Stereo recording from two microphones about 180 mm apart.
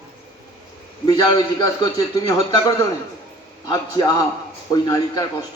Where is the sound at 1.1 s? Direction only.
20° left (ahead or behind).